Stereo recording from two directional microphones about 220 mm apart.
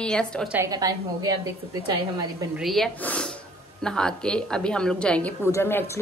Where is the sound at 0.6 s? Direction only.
15° right (ahead or behind).